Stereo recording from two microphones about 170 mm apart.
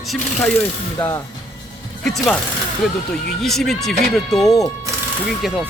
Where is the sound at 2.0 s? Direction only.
5° left (ahead or behind).